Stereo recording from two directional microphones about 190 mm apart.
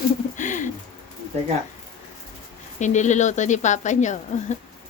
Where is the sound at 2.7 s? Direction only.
40° left (ahead or behind).